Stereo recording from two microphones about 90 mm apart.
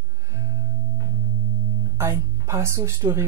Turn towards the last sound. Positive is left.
turn(degrees=-30)  # may be behind; listen again after turning